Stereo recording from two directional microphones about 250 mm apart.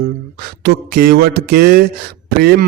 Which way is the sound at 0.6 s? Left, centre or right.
Right.